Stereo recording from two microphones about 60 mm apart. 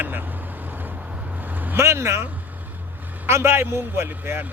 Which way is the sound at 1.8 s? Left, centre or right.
Right.